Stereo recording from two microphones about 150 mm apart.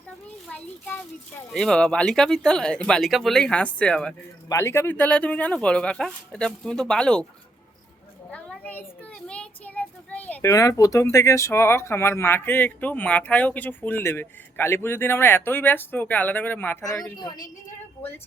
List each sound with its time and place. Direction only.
1.5 s speech: 5° left (ahead or behind)
4.4 s speech: 20° left (ahead or behind)
8.3 s child singing: 10° left (ahead or behind)
10.5 s a woman's voice: 20° left (ahead or behind)